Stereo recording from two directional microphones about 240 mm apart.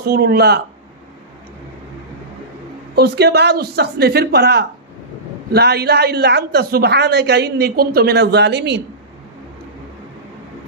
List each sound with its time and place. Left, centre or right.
0.0 s speech: right
3.0 s a woman's voice: right